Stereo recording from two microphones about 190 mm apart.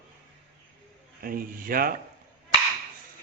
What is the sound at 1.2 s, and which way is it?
Speech, 50° right (ahead or behind).